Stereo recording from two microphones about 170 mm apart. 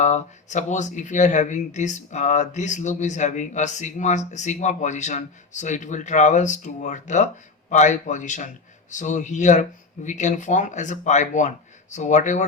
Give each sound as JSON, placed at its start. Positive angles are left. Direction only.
{"t": 0.0, "sound": "speech", "side_deg": 45}